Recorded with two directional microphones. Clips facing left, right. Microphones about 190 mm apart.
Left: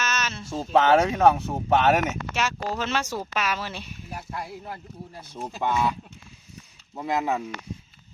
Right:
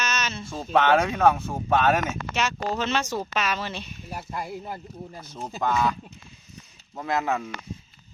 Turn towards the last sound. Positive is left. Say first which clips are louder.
# even
turn(degrees=15)  # may be behind; listen again after turning